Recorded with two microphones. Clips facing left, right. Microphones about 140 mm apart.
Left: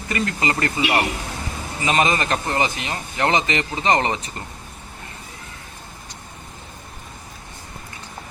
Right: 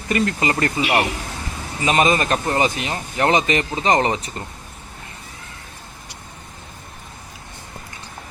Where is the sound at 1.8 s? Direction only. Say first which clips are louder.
Right 2 dB; 25° right (ahead or behind).